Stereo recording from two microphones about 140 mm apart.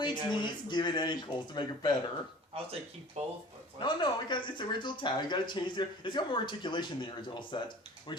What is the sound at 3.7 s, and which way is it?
Speech, 35° left (ahead or behind).